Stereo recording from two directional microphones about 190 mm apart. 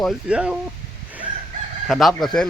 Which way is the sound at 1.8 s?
Centre (ahead or behind).